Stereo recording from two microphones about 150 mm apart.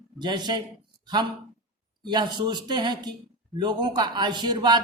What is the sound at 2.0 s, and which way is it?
A man's voice, 30° right (ahead or behind).